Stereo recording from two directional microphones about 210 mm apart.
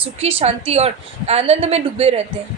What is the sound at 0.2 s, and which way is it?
A woman's voice, 30° right (ahead or behind).